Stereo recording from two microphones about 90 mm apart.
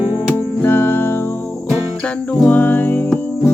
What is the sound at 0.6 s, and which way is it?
Music, 25° left (ahead or behind).